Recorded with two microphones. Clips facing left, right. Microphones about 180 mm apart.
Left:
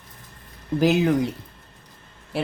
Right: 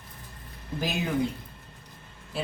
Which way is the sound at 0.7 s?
75° left (ahead or behind).